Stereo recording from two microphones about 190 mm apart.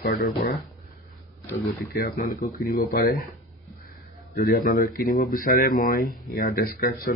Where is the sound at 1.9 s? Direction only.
50° left (ahead or behind).